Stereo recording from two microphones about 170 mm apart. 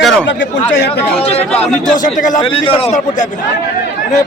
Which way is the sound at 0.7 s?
80° left.